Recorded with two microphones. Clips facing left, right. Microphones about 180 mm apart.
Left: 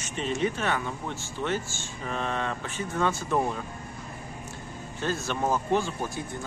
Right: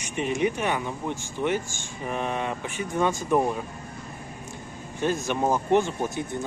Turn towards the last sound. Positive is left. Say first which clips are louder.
# right 4 dB
turn(degrees=-20)  # may be behind; listen again after turning